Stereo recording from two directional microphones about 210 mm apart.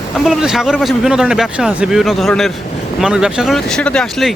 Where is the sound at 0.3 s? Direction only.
Centre (ahead or behind).